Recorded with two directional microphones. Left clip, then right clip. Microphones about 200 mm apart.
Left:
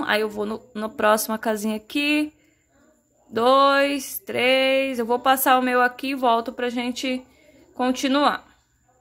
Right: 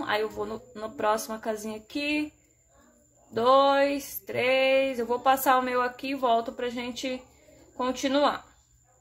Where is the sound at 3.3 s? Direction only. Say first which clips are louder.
Left 4 dB; 35° left (ahead or behind).